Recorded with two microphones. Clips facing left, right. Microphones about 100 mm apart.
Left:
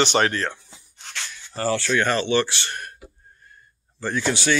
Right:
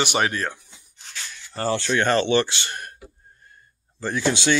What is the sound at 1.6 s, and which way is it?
Speech, 25° right (ahead or behind).